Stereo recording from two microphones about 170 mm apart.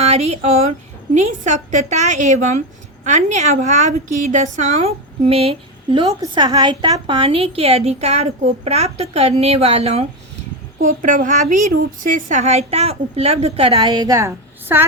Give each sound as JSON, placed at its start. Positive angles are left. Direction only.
{"t": 0.0, "sound": "a woman's voice", "side_deg": -40}
{"t": 10.8, "sound": "a woman's voice", "side_deg": -50}